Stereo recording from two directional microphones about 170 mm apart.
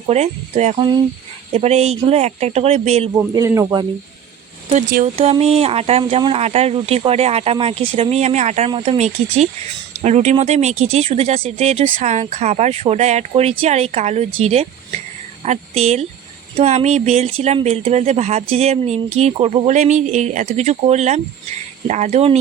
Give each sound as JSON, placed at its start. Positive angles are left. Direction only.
{"t": 0.1, "sound": "speech", "side_deg": -40}
{"t": 3.2, "sound": "speech", "side_deg": -15}
{"t": 4.7, "sound": "speech", "side_deg": -55}
{"t": 5.0, "sound": "speech", "side_deg": -40}